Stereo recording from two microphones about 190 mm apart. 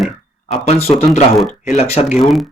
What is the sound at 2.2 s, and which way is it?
Speech, centre (ahead or behind).